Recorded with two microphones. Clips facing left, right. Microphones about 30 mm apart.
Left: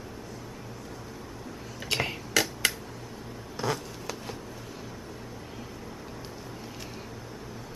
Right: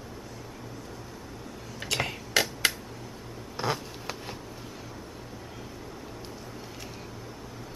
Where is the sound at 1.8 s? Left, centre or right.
Right.